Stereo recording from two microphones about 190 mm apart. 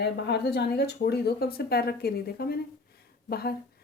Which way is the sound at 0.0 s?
60° left (ahead or behind).